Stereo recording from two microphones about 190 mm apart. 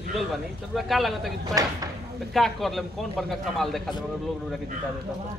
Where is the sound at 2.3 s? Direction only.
Centre (ahead or behind).